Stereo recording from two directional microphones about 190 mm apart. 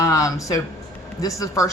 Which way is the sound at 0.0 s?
15° left (ahead or behind).